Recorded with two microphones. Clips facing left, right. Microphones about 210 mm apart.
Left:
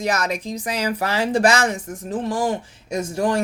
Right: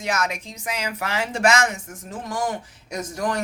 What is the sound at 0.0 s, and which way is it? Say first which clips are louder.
Speech: left 3 dB; 35° left (ahead or behind).